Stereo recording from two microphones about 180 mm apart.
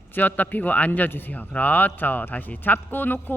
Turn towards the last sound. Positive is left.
turn(degrees=10)  # may be behind; listen again after turning